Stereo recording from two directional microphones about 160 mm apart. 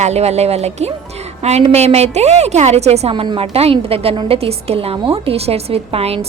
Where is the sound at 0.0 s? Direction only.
45° right (ahead or behind).